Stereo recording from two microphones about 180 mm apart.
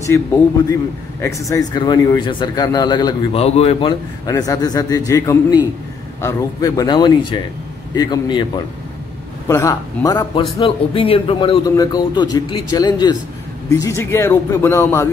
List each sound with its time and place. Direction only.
0.0 s speech: 15° left (ahead or behind)
3.3 s a man's voice: 35° left (ahead or behind)
4.3 s speech: 20° left (ahead or behind)
10.6 s speech: 30° left (ahead or behind); by 15.0 s 15° left (ahead or behind)